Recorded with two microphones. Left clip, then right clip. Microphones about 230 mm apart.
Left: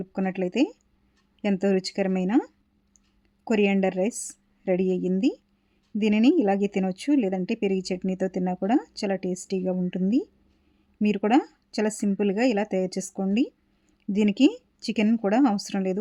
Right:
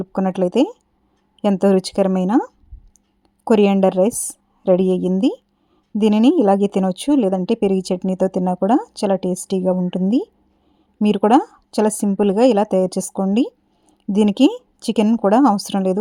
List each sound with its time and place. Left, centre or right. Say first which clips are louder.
0.0 s speech: right 9 dB; right
3.4 s a woman's voice: right 9 dB; right
6.2 s speech: right 7 dB; right
13.2 s a sound: right 5 dB; right
14.1 s speech: right 7 dB; right